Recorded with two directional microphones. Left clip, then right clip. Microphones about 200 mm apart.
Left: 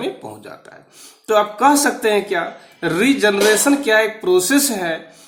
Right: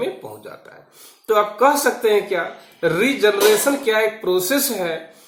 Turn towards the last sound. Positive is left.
turn(degrees=50)  # may be behind; listen again after turning